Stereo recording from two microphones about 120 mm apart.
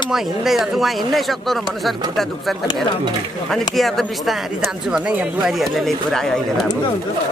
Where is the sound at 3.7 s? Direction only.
Centre (ahead or behind).